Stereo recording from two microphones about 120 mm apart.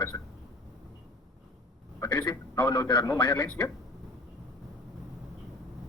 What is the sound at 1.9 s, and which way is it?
A man's voice, 35° left (ahead or behind).